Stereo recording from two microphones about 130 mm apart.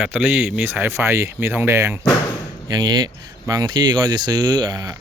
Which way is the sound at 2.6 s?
30° right (ahead or behind).